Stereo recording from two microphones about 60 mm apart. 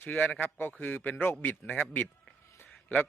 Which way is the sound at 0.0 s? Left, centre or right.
Left.